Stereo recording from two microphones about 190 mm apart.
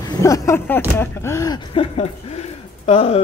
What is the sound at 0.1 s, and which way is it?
Speech, 15° left (ahead or behind).